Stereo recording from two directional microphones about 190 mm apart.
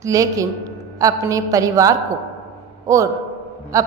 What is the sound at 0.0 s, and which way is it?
A woman's voice, 15° right (ahead or behind).